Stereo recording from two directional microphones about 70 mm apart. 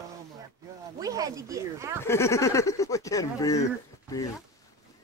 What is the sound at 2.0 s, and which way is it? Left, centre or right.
Speech, left.